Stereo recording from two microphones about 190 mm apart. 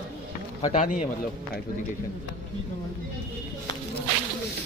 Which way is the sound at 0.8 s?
45° left (ahead or behind).